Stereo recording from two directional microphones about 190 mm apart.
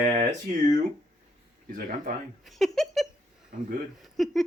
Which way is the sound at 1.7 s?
45° right (ahead or behind).